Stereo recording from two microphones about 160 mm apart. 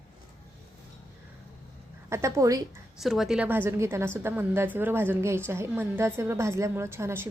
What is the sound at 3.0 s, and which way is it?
A woman's voice, centre (ahead or behind).